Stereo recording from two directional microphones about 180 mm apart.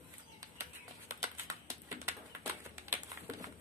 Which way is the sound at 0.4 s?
15° right (ahead or behind).